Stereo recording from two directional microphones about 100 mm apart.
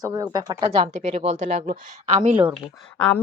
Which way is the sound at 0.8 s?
90° right.